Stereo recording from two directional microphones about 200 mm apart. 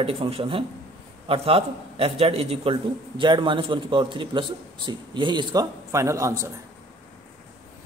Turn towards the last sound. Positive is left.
turn(degrees=-15)  # may be behind; listen again after turning